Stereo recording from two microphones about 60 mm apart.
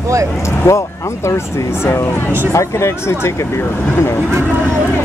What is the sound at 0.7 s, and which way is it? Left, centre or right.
Speech, left.